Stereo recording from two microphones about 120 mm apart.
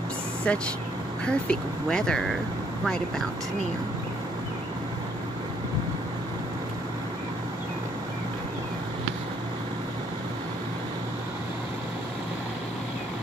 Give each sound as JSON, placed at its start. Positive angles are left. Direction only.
{"t": 0.5, "sound": "speech", "side_deg": 10}